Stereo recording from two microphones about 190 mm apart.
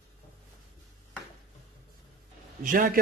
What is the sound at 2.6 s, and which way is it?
Speech, 45° right (ahead or behind).